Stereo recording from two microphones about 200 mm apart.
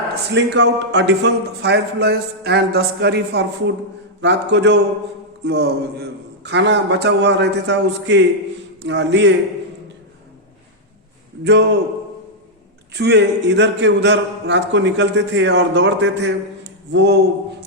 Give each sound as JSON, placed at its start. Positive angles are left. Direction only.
{"t": 0.3, "sound": "a man's voice", "side_deg": -60}
{"t": 11.4, "sound": "a man's voice", "side_deg": -60}
{"t": 12.9, "sound": "a man's voice", "side_deg": -55}